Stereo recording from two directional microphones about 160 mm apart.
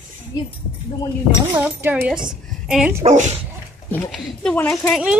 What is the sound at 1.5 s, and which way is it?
Speech, 10° right (ahead or behind).